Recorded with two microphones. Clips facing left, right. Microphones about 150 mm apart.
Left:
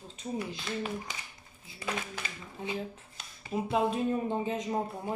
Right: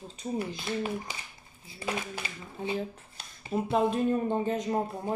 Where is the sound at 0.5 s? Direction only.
10° right (ahead or behind).